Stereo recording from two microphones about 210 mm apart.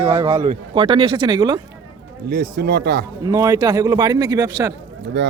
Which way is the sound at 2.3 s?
50° right (ahead or behind).